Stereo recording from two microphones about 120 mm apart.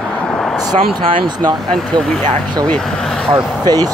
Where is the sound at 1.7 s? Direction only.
5° left (ahead or behind).